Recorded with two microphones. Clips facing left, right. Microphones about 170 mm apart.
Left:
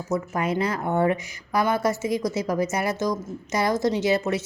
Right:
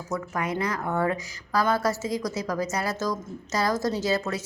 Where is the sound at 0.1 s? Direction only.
25° left (ahead or behind).